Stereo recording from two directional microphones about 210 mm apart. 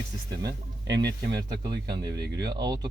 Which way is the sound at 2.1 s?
50° right (ahead or behind).